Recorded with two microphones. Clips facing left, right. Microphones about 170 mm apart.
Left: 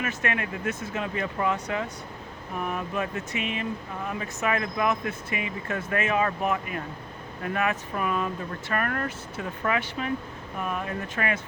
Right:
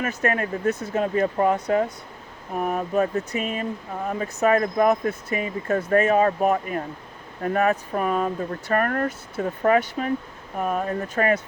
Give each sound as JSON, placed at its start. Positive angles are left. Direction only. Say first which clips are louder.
{"t": 0.0, "sound": "speech", "louder": "right 5 dB", "side_deg": -35}